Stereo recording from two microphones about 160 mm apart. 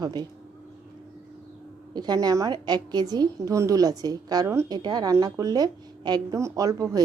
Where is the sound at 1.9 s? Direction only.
25° right (ahead or behind).